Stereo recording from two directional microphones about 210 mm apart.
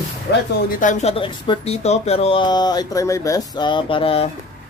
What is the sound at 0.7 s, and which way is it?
Speech, 35° left (ahead or behind).